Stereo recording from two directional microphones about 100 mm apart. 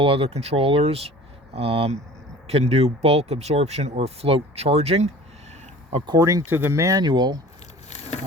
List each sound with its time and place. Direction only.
0.0 s speech: 70° right (ahead or behind)
2.5 s speech: 90° right
6.1 s speech: 30° right (ahead or behind)
7.0 s speech: 45° right (ahead or behind)